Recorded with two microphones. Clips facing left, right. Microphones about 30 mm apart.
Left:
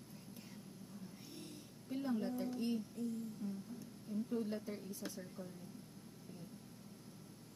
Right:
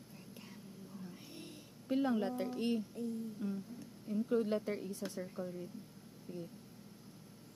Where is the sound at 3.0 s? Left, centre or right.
Right.